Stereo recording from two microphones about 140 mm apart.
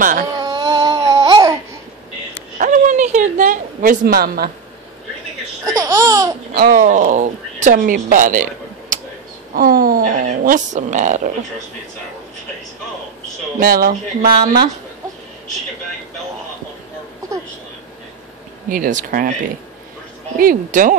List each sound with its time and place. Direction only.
0.4 s a sound: 30° right (ahead or behind)
2.6 s a sound: 65° right (ahead or behind); by 4.5 s 90° right
5.7 s laughter: 25° right (ahead or behind)
6.5 s speech: 90° right; by 9.0 s 70° right (ahead or behind)
9.6 s a woman's voice: 90° right; by 11.3 s 60° right (ahead or behind)
13.6 s speech: 90° right
18.7 s speech: 70° right (ahead or behind)
20.3 s speech: 80° right